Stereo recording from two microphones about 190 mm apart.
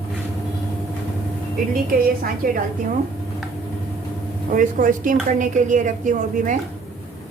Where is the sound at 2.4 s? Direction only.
50° right (ahead or behind).